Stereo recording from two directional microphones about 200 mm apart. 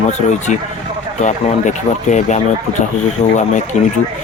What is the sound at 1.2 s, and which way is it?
Speech, 35° left (ahead or behind).